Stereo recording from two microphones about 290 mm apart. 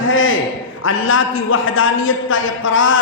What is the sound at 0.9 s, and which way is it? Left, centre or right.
A man's voice, left.